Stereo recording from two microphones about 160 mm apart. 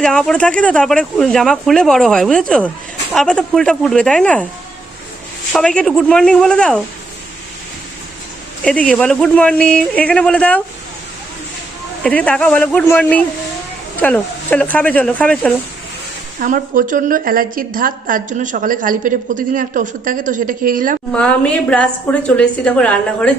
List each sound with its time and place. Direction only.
0.0 s speech: 5° left (ahead or behind)
5.5 s speech: 5° left (ahead or behind)
8.6 s a woman's voice: 5° left (ahead or behind)
12.0 s a woman's voice: 10° left (ahead or behind)
16.4 s a woman's voice: 55° right (ahead or behind)
21.1 s a woman's voice: 5° left (ahead or behind)